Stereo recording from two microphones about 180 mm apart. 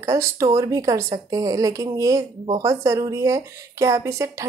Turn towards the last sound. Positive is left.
turn(degrees=-15)  # may be behind; listen again after turning